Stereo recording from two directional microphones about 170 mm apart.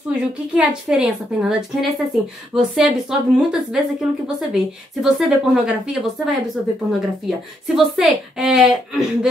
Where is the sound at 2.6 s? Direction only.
5° right (ahead or behind).